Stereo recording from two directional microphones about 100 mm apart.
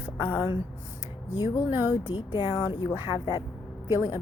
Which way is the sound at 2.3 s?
45° left (ahead or behind).